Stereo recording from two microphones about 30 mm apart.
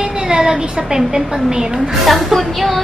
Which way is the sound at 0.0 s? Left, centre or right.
Right.